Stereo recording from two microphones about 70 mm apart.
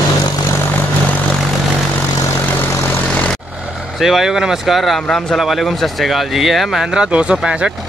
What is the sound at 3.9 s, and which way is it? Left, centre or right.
Speech, centre.